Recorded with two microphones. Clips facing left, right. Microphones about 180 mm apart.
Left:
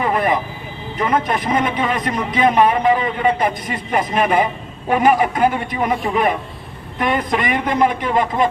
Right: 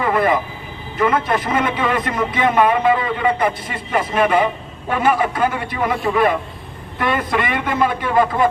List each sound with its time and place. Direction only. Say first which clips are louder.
0.0 s vehicle: right 1 dB; 20° left (ahead or behind)
0.9 s a man's voice: right 1 dB; 20° left (ahead or behind)